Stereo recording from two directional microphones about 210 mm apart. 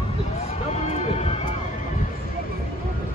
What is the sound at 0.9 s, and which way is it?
Music, 30° left (ahead or behind).